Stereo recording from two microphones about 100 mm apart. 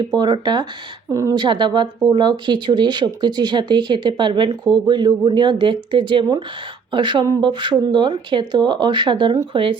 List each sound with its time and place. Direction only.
0.0 s speech: 45° right (ahead or behind)
1.1 s a woman's voice: 30° right (ahead or behind)
1.4 s speech: 55° right (ahead or behind)